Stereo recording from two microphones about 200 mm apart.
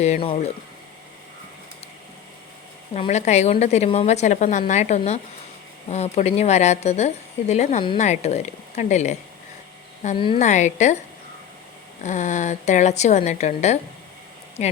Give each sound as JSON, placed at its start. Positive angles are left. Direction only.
{"t": 0.0, "sound": "a woman's voice", "side_deg": 30}
{"t": 2.9, "sound": "a woman's voice", "side_deg": 35}
{"t": 12.0, "sound": "a woman's voice", "side_deg": 35}